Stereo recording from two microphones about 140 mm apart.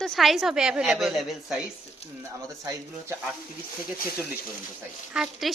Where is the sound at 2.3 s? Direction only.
25° right (ahead or behind).